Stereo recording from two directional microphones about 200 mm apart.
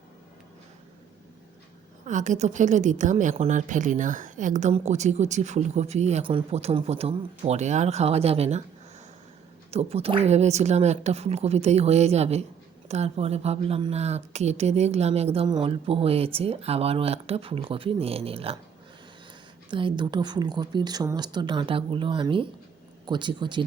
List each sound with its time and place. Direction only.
2.0 s a woman's voice: 40° right (ahead or behind)
9.7 s a woman's voice: 30° right (ahead or behind)
19.7 s speech: 25° right (ahead or behind)